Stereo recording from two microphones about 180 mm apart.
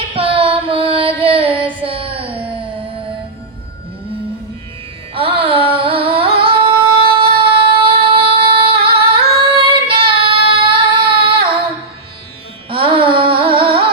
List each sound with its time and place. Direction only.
0.1 s music: 30° right (ahead or behind)
5.1 s music: 30° right (ahead or behind)
9.6 s child singing: 30° right (ahead or behind)
12.7 s music: 30° right (ahead or behind)